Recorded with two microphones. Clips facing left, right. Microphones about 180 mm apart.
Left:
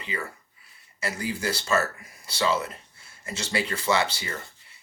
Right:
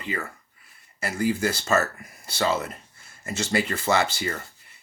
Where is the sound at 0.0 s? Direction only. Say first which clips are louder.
Right 2 dB; 50° right (ahead or behind).